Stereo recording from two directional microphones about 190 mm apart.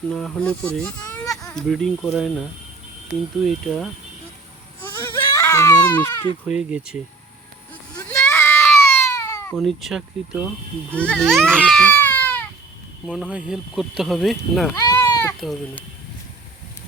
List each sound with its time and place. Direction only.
0.1 s speech: centre (ahead or behind)
1.2 s a sound: 15° left (ahead or behind)
1.5 s speech: centre (ahead or behind)
3.4 s speech: centre (ahead or behind)
4.8 s a sound: 10° left (ahead or behind)
5.4 s speech: 15° left (ahead or behind)
6.6 s speech: 5° right (ahead or behind)
7.9 s baby cry: 10° left (ahead or behind)
9.6 s speech: centre (ahead or behind)
11.0 s speech: 5° left (ahead or behind)
13.1 s speech: 5° right (ahead or behind)
14.8 s sheep: 20° left (ahead or behind)